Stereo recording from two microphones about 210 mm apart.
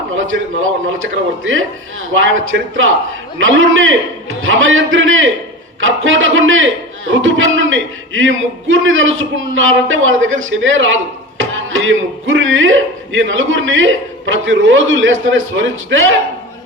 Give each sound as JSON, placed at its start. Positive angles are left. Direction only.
{"t": 0.1, "sound": "a man's voice", "side_deg": -70}
{"t": 2.2, "sound": "a man's voice", "side_deg": -70}